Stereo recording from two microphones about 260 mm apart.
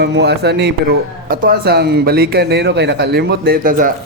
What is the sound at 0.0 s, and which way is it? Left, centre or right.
Speech, right.